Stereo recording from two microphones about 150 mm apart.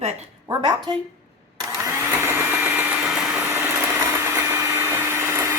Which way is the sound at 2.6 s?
10° right (ahead or behind).